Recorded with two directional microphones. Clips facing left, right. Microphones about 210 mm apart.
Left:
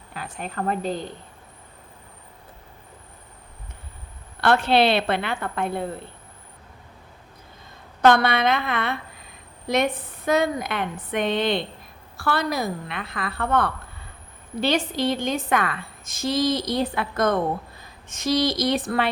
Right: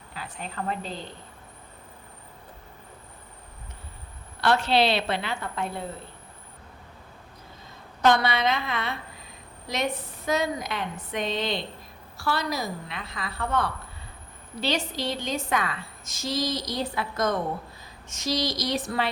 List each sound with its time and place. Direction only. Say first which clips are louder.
0.1 s a woman's voice: left 4 dB; 55° left (ahead or behind)
4.4 s a woman's voice: left 3 dB; 55° left (ahead or behind)
8.0 s a woman's voice: left 4 dB; 55° left (ahead or behind)
14.9 s a woman's voice: left 6 dB; 55° left (ahead or behind)